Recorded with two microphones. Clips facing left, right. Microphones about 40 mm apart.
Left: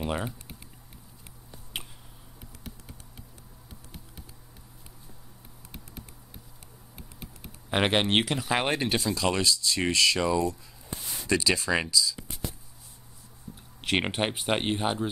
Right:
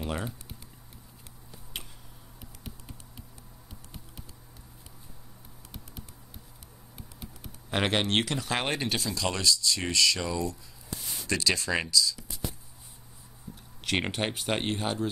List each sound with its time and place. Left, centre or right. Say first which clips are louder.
0.0 s speech: left 3 dB; centre
1.7 s a sound: left 3 dB; centre
7.7 s speech: left 3 dB; centre
13.8 s speech: left 2 dB; centre